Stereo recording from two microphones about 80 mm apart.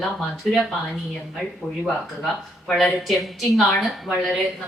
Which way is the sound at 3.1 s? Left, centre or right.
Centre.